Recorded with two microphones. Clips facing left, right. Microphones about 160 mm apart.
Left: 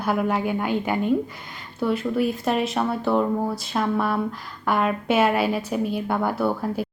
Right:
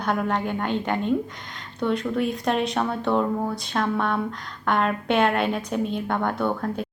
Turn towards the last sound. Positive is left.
turn(degrees=5)  # may be behind; listen again after turning